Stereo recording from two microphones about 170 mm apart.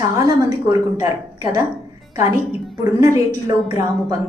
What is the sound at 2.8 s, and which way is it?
Speech, 20° right (ahead or behind).